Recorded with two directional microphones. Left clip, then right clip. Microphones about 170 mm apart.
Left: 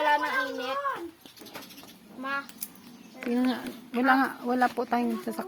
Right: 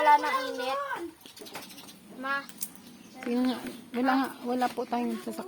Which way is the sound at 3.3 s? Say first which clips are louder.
Left 1 dB; 10° left (ahead or behind).